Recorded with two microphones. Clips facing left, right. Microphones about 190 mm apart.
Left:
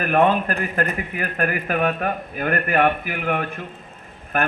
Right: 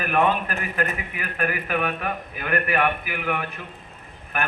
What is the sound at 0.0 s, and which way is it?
Speech, 45° left (ahead or behind).